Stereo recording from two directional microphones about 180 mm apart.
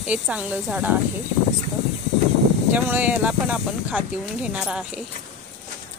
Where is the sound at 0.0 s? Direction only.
5° right (ahead or behind).